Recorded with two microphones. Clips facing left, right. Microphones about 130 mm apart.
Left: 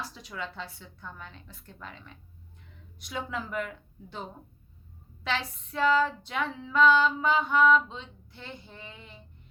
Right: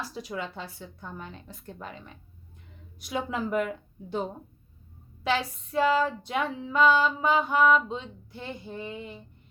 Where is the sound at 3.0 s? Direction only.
15° right (ahead or behind).